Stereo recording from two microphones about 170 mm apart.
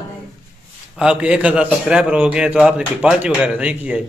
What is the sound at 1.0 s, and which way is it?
A man's voice, 5° right (ahead or behind).